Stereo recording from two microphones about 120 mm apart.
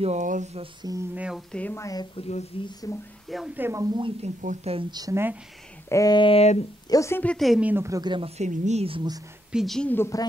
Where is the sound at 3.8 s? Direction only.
40° right (ahead or behind).